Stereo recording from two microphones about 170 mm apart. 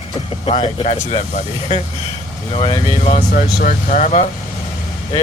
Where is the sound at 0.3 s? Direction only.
30° left (ahead or behind).